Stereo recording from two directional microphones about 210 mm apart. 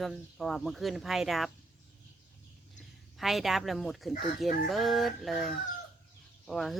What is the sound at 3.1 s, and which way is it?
A woman's voice, centre (ahead or behind).